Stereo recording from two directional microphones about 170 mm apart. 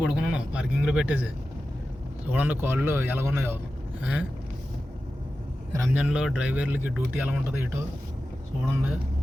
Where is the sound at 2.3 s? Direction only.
10° right (ahead or behind).